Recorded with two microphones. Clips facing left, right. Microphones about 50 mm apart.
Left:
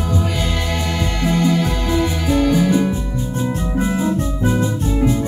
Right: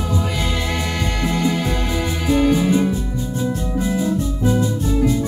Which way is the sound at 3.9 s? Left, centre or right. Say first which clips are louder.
Left 1 dB; left.